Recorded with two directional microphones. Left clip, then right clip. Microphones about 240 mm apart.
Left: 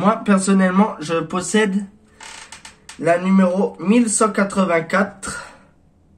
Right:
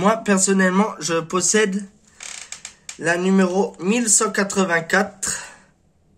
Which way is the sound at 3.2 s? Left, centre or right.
Right.